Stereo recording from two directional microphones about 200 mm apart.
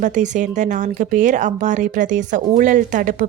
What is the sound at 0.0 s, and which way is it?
Speech, 40° right (ahead or behind).